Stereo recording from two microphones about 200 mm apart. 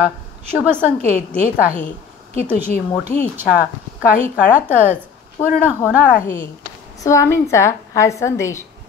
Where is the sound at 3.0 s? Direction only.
5° right (ahead or behind).